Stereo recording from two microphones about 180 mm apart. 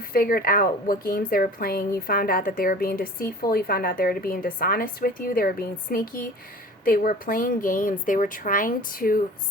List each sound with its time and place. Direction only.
0.1 s a woman's voice: 55° left (ahead or behind)